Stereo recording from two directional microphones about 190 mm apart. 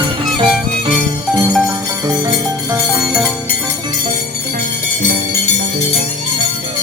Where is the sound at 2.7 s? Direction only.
15° right (ahead or behind).